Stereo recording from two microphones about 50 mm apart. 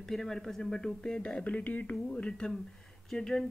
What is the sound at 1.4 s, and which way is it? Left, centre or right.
Speech, left.